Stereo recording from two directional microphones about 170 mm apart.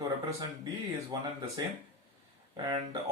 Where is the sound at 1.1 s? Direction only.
20° right (ahead or behind).